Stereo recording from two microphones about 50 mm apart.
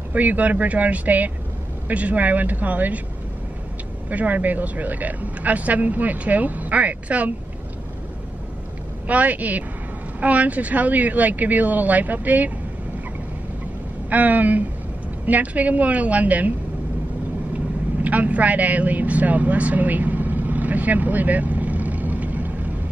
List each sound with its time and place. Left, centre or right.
0.1 s speech: right
4.1 s speech: right
9.0 s speech: right
14.1 s speech: right
18.0 s vehicle: right